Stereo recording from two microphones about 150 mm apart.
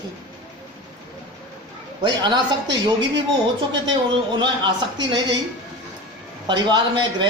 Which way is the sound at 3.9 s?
30° right (ahead or behind).